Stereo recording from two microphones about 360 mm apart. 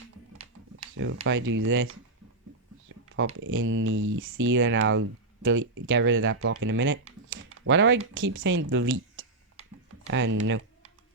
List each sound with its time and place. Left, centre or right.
0.9 s speech: right
2.9 s a sound: right
3.4 s speech: right